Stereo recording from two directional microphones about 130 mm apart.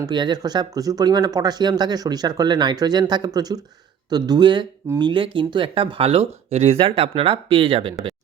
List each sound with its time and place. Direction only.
0.0 s speech: 35° right (ahead or behind)